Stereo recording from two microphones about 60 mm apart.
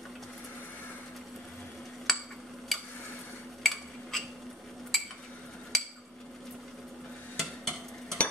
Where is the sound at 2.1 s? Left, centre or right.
Centre.